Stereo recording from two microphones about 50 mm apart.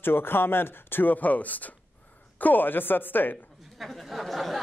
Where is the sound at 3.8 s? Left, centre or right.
Centre.